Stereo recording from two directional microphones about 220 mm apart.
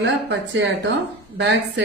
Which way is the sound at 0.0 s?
55° right (ahead or behind).